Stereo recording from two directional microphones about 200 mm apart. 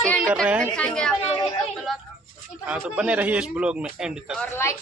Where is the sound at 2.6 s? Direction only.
10° right (ahead or behind).